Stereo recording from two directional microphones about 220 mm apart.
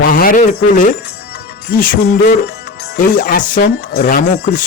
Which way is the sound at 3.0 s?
40° left (ahead or behind).